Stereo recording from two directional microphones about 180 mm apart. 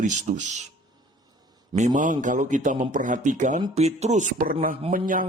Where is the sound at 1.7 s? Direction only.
45° right (ahead or behind).